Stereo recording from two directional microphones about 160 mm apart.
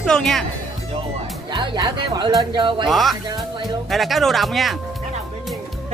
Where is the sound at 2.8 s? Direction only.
Centre (ahead or behind).